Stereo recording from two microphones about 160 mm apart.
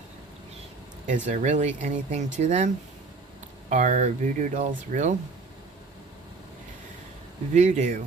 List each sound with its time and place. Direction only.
1.0 s speech: 50° right (ahead or behind)
7.5 s speech: 50° right (ahead or behind)